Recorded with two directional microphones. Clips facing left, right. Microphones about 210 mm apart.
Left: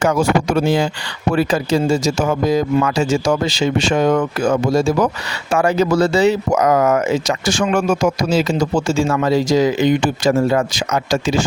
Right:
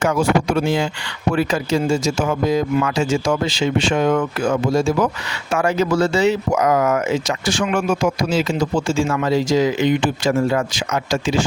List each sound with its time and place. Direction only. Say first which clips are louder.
0.0 s speech: left 2 dB; 40° left (ahead or behind)